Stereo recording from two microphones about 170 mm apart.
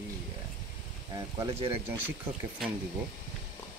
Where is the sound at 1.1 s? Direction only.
20° right (ahead or behind).